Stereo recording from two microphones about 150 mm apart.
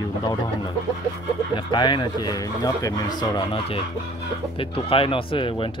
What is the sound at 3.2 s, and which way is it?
Speech, 30° left (ahead or behind).